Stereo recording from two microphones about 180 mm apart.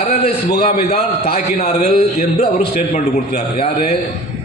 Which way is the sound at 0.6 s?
40° left (ahead or behind).